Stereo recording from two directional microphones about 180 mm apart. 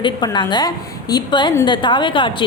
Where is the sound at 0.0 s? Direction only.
25° left (ahead or behind).